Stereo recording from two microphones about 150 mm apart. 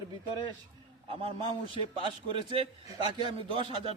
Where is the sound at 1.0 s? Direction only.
35° right (ahead or behind).